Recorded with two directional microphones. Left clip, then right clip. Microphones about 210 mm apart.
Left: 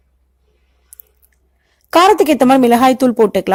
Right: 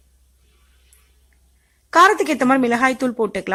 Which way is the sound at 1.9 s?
20° left (ahead or behind).